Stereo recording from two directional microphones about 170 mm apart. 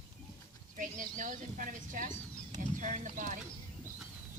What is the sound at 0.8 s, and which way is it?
Speech, 50° right (ahead or behind).